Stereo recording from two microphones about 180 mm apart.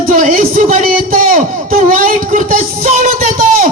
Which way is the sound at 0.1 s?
45° right (ahead or behind).